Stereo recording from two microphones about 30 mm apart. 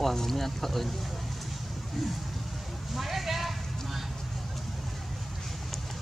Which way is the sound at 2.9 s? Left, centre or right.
Centre.